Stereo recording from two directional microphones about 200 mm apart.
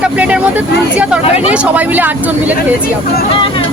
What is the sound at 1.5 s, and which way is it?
Speech, 10° right (ahead or behind).